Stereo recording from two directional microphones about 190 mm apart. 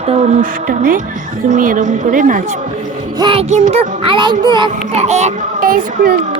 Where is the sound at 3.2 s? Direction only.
25° right (ahead or behind).